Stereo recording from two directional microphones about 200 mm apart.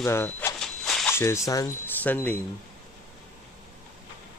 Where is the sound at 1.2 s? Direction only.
15° left (ahead or behind).